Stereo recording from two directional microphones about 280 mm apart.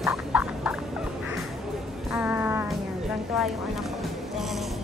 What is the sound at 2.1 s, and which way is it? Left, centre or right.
Music, centre.